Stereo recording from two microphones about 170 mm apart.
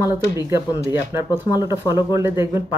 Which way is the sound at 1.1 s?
15° right (ahead or behind).